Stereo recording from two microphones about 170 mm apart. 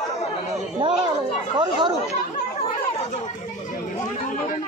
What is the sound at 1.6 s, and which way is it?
Chatter, 25° right (ahead or behind).